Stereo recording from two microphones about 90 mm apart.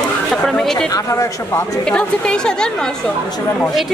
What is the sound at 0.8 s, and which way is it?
Speech, 35° left (ahead or behind).